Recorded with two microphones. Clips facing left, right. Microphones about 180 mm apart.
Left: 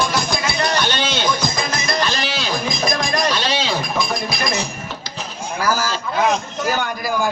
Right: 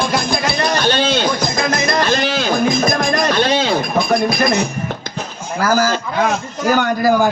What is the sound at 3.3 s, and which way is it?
Chink, 55° right (ahead or behind).